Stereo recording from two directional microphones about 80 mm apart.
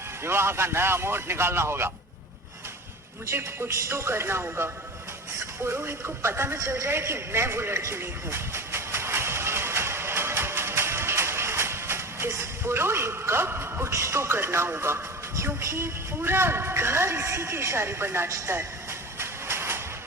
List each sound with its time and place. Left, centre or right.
0.2 s a man's voice: right
3.2 s a man's voice: right
6.6 s a sound: right
13.9 s a man's voice: right
18.3 s a woman's voice: right
18.5 s train: right